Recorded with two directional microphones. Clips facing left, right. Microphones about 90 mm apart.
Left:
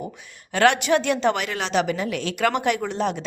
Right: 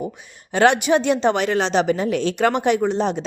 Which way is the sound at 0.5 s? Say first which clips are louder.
Right 3 dB; 20° right (ahead or behind).